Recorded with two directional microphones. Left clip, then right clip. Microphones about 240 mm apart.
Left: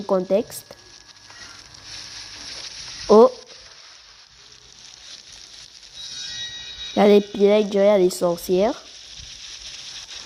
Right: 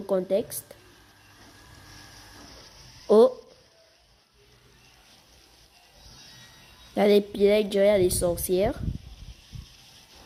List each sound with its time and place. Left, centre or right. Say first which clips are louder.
0.1 s speech: left 5 dB; centre
2.0 s a sound: left 13 dB; left
3.1 s frying: left 5 dB; centre
6.9 s speech: left 5 dB; centre